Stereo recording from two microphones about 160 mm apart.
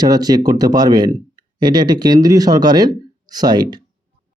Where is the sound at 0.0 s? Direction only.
25° right (ahead or behind).